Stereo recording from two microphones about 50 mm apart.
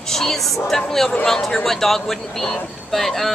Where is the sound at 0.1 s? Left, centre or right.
Centre.